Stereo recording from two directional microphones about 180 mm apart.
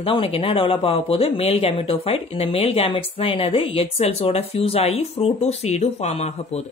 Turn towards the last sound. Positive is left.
turn(degrees=40)  # may be behind; listen again after turning